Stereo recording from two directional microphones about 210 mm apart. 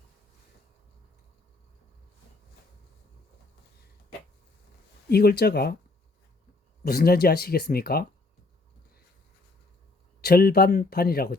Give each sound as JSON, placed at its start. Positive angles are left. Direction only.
{"t": 5.0, "sound": "speech", "side_deg": 50}
{"t": 6.8, "sound": "speech", "side_deg": 45}
{"t": 10.2, "sound": "speech", "side_deg": 45}